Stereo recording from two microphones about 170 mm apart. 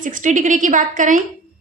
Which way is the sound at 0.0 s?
50° right (ahead or behind).